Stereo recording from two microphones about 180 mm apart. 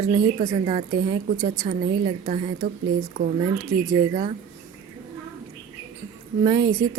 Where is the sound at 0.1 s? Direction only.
40° right (ahead or behind).